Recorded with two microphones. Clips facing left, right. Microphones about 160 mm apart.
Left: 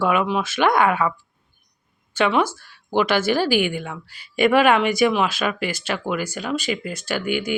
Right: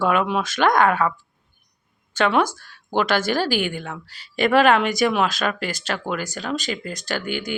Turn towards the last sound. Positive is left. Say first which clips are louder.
# left 3 dB
turn(degrees=5)  # may be behind; listen again after turning